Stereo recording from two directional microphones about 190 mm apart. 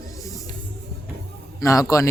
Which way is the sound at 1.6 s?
15° left (ahead or behind).